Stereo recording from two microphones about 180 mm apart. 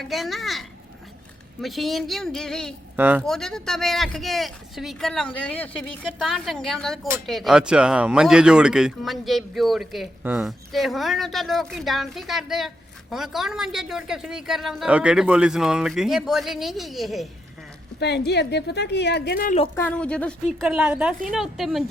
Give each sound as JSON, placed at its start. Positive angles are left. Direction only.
{"t": 0.0, "sound": "speech", "side_deg": 0}
{"t": 1.6, "sound": "speech", "side_deg": 0}
{"t": 2.9, "sound": "speech", "side_deg": -10}
{"t": 3.2, "sound": "speech", "side_deg": 0}
{"t": 18.3, "sound": "a woman's voice", "side_deg": 70}
{"t": 19.7, "sound": "speech", "side_deg": 10}
{"t": 20.6, "sound": "speech", "side_deg": -5}